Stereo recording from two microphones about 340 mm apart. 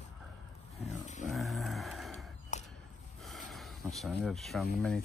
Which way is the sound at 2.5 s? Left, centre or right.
Left.